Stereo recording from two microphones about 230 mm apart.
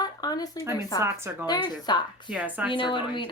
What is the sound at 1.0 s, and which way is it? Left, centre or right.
Speech, centre.